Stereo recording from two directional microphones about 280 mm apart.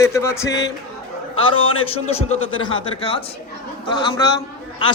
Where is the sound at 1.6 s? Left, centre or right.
Centre.